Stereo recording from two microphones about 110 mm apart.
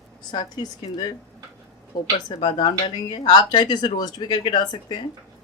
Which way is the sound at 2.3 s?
45° left (ahead or behind).